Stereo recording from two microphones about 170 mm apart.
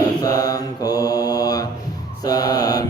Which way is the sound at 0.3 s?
20° left (ahead or behind).